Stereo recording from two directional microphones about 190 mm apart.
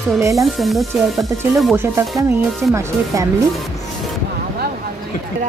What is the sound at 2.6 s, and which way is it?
Speech, 5° right (ahead or behind).